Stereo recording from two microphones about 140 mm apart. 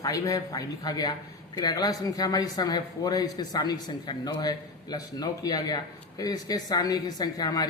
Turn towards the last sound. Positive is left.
turn(degrees=30)  # may be behind; listen again after turning